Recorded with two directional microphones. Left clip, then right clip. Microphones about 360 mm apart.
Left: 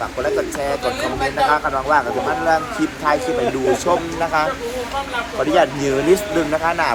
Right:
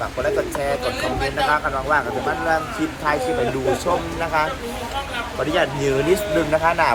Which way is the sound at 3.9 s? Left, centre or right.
Centre.